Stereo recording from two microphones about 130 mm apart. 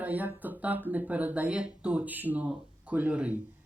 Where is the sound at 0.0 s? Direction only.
10° right (ahead or behind).